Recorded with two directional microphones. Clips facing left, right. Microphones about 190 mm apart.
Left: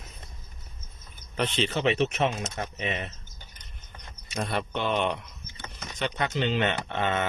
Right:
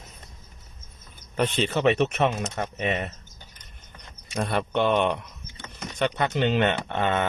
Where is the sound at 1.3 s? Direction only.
45° right (ahead or behind).